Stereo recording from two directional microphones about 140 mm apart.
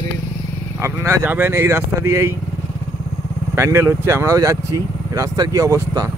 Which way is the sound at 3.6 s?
20° right (ahead or behind).